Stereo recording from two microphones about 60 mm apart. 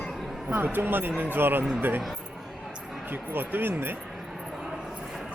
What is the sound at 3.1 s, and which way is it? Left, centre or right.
Speech, right.